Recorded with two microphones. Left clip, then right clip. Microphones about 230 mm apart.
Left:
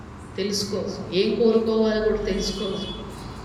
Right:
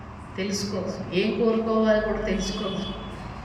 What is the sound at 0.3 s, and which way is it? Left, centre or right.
A man's voice, centre.